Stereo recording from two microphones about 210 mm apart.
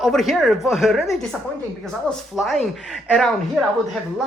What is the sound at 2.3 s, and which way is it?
Speech, centre (ahead or behind).